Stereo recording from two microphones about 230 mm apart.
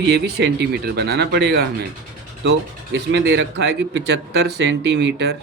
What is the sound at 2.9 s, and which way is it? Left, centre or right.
Speech, right.